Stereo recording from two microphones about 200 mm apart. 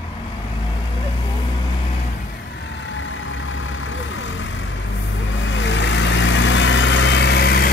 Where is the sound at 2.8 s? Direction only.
70° left (ahead or behind).